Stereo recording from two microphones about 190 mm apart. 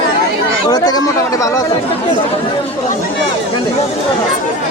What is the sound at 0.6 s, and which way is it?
Chatter, 20° left (ahead or behind).